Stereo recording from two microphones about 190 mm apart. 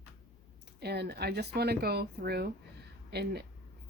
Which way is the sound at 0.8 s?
60° right (ahead or behind).